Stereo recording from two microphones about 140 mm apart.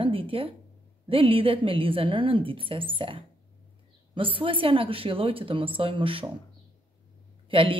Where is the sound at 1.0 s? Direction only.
40° right (ahead or behind).